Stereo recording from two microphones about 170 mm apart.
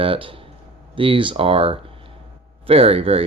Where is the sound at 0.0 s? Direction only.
30° right (ahead or behind).